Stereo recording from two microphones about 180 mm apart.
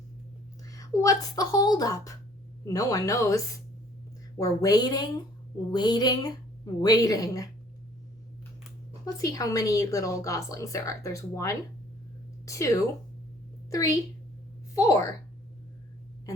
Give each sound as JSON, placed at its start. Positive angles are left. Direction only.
{"t": 0.7, "sound": "a woman's voice", "side_deg": 20}
{"t": 9.0, "sound": "a woman's voice", "side_deg": 20}